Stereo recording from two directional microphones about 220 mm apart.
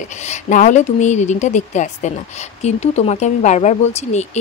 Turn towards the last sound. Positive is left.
turn(degrees=30)  # may be behind; listen again after turning